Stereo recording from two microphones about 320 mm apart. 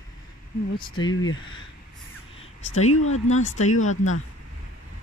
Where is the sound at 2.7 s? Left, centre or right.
Left.